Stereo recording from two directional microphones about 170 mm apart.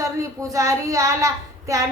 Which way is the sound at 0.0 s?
20° right (ahead or behind).